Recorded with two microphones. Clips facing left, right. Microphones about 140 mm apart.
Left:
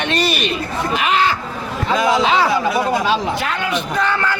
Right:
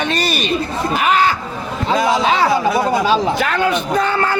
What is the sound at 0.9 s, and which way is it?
A man's voice, 45° right (ahead or behind).